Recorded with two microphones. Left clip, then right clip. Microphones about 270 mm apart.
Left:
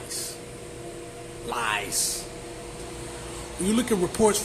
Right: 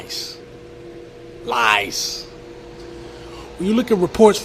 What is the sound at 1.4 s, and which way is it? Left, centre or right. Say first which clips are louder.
Speech: right 11 dB; right.